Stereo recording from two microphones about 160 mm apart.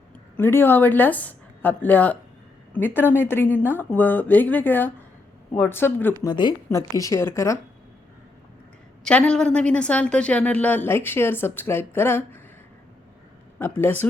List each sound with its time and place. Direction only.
0.3 s speech: 15° left (ahead or behind)
6.2 s speech: 30° left (ahead or behind)
9.0 s speech: 5° left (ahead or behind)
13.6 s speech: 15° left (ahead or behind)